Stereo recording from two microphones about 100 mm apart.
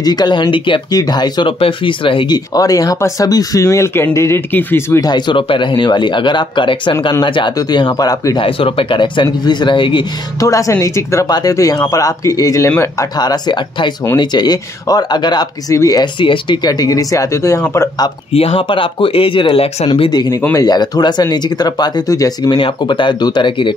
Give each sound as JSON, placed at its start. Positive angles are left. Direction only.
{"t": 0.0, "sound": "speech", "side_deg": 45}
{"t": 1.6, "sound": "speech", "side_deg": 60}
{"t": 2.3, "sound": "speech", "side_deg": 40}
{"t": 5.0, "sound": "speech", "side_deg": 50}
{"t": 8.4, "sound": "speech", "side_deg": 65}
{"t": 10.4, "sound": "speech", "side_deg": 35}
{"t": 13.2, "sound": "speech", "side_deg": 45}
{"t": 15.7, "sound": "speech", "side_deg": 30}
{"t": 16.0, "sound": "speech", "side_deg": 55}
{"t": 18.3, "sound": "speech", "side_deg": 75}
{"t": 20.1, "sound": "speech", "side_deg": 45}
{"t": 22.5, "sound": "speech", "side_deg": 55}